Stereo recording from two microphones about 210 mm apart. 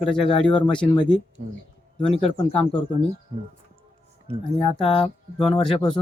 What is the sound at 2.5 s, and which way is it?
Speech, 5° left (ahead or behind).